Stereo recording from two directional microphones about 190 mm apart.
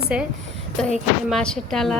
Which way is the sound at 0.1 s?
5° right (ahead or behind).